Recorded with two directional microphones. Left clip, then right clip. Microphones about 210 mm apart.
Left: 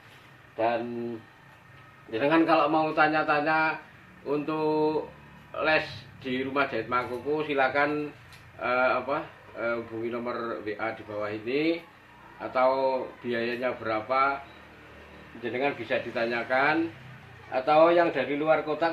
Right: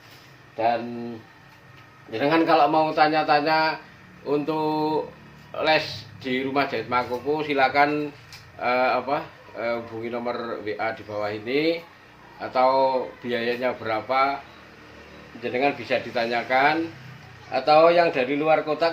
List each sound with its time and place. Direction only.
2.1 s a man's voice: 20° right (ahead or behind)
15.5 s a man's voice: 30° right (ahead or behind)